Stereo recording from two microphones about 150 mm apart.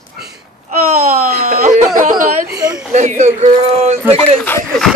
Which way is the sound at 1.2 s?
50° right (ahead or behind).